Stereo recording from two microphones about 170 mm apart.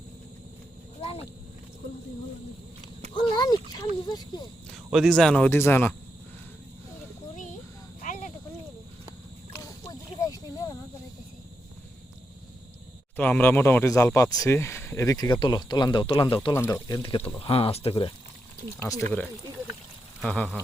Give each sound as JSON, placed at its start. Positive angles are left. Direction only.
{"t": 3.2, "sound": "speech", "side_deg": 25}
{"t": 4.9, "sound": "speech", "side_deg": 0}
{"t": 5.5, "sound": "speech", "side_deg": 15}
{"t": 8.0, "sound": "a sound", "side_deg": 50}
{"t": 9.6, "sound": "a sound", "side_deg": 20}
{"t": 13.1, "sound": "speech", "side_deg": 10}
{"t": 18.8, "sound": "speech", "side_deg": 20}
{"t": 20.2, "sound": "speech", "side_deg": 5}